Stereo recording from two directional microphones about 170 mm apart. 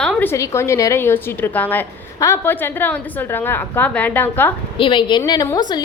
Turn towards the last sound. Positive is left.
turn(degrees=25)  # may be behind; listen again after turning